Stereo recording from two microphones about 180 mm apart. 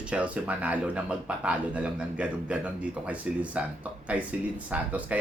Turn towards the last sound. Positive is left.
turn(degrees=-10)  # may be behind; listen again after turning